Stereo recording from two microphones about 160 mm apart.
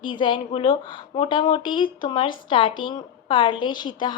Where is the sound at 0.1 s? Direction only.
30° left (ahead or behind).